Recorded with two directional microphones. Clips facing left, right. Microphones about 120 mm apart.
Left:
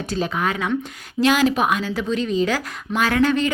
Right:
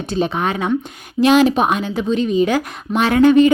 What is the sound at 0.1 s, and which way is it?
A woman's voice, 25° right (ahead or behind).